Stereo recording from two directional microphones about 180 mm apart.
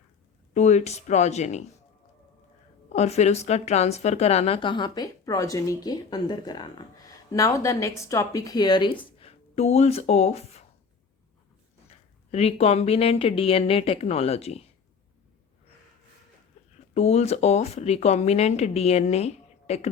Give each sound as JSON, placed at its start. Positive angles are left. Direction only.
{"t": 0.5, "sound": "a woman's voice", "side_deg": 40}
{"t": 2.9, "sound": "speech", "side_deg": 40}
{"t": 11.9, "sound": "a woman's voice", "side_deg": 35}
{"t": 16.6, "sound": "a sound", "side_deg": 40}
{"t": 16.9, "sound": "a woman's voice", "side_deg": 35}